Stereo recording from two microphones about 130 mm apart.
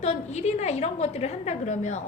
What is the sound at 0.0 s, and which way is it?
A woman's voice, 60° left (ahead or behind).